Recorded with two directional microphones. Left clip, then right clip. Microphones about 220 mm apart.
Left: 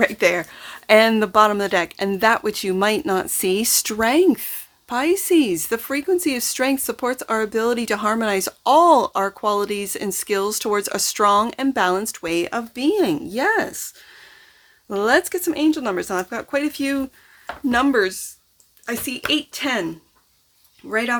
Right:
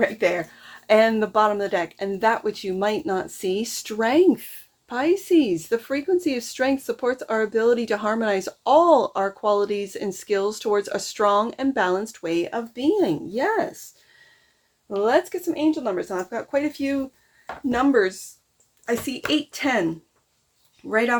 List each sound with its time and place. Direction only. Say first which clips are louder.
0.0 s a woman's voice: left 3 dB; 35° left (ahead or behind)
15.0 s a woman's voice: left 3 dB; 30° left (ahead or behind); by 19.9 s 10° left (ahead or behind)
20.9 s speech: even; 5° left (ahead or behind)